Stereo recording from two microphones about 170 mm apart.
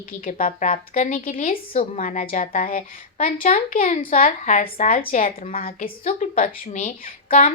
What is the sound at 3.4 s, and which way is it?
A woman's voice, 45° left (ahead or behind).